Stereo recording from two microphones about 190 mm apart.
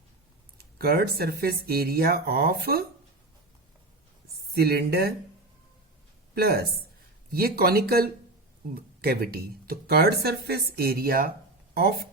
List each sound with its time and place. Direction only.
0.8 s speech: 55° right (ahead or behind)
4.5 s speech: 55° right (ahead or behind)
6.3 s speech: 55° right (ahead or behind)